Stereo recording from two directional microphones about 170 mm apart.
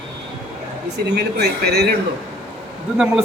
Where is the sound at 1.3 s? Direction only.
75° right (ahead or behind).